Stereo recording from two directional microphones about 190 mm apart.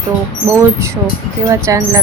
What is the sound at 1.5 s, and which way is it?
Wind chime, 15° right (ahead or behind).